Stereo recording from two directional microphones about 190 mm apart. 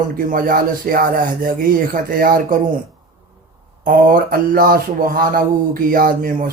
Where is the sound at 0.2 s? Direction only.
45° right (ahead or behind).